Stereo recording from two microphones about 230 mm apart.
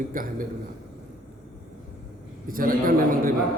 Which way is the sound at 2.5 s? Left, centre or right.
Right.